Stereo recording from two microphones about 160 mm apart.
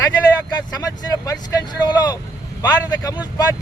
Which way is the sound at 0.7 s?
20° left (ahead or behind).